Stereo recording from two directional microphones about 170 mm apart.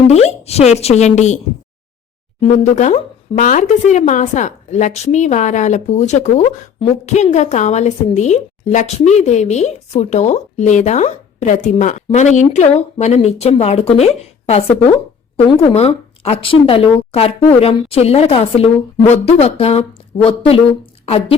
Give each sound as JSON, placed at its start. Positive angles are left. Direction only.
{"t": 0.1, "sound": "a woman's voice", "side_deg": 40}
{"t": 2.4, "sound": "speech", "side_deg": 40}
{"t": 15.6, "sound": "a woman's voice", "side_deg": 35}